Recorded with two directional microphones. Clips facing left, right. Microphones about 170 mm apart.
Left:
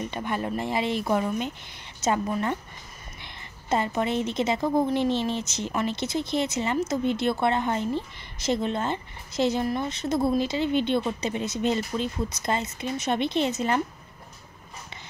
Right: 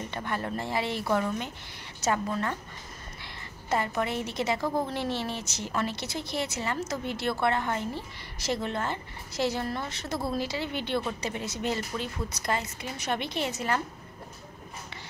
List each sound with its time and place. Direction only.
0.0 s a woman's voice: 20° left (ahead or behind)